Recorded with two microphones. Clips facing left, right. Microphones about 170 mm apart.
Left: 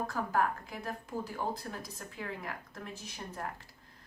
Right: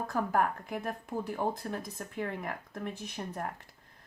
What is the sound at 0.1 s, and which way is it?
A woman's voice, 50° right (ahead or behind).